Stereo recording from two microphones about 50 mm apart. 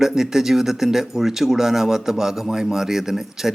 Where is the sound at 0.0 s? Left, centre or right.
Centre.